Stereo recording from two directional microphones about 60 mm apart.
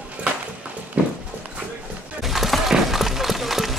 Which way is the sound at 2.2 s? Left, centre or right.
Centre.